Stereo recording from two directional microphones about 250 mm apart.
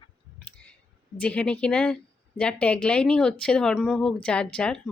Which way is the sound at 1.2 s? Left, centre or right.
Centre.